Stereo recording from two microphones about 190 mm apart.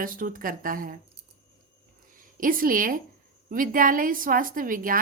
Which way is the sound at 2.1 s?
45° right (ahead or behind).